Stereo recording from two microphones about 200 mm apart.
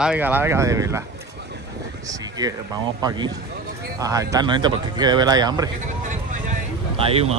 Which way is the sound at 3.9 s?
15° right (ahead or behind).